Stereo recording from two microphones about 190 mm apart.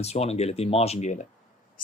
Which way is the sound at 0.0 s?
35° left (ahead or behind).